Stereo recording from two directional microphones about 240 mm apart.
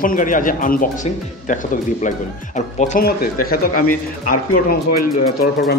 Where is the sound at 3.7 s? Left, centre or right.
Left.